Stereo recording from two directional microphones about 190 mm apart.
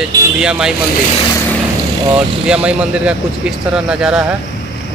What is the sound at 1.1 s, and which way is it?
Speech, 25° left (ahead or behind).